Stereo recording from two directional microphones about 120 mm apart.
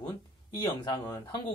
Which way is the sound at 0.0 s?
35° left (ahead or behind).